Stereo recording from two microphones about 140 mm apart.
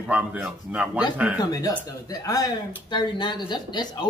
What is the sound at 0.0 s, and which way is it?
Speech, 10° right (ahead or behind).